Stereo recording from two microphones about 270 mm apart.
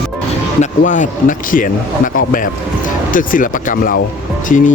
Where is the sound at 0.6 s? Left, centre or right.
Left.